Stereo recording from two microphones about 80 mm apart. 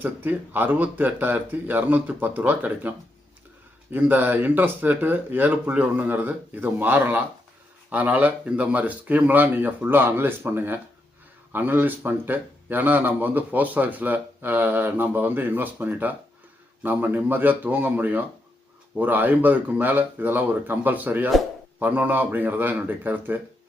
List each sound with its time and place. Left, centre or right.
0.0 s a man's voice: right
3.9 s a man's voice: right